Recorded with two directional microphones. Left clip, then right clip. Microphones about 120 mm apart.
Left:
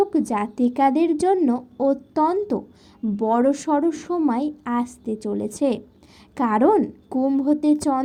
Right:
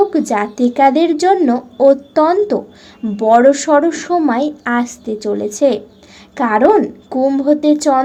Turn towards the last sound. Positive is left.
turn(degrees=30)  # may be behind; listen again after turning